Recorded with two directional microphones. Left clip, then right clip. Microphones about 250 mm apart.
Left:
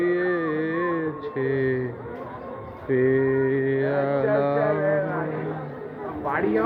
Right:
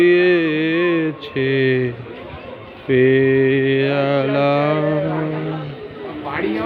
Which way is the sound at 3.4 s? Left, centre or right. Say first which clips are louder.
Right 7 dB; centre.